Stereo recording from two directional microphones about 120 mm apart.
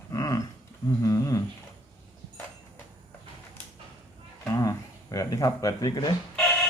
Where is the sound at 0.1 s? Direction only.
30° left (ahead or behind).